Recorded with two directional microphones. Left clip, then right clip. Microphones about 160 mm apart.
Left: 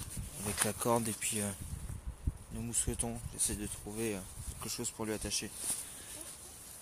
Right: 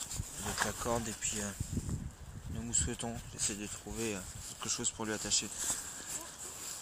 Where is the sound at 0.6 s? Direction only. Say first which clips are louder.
Left 5 dB; 55° left (ahead or behind).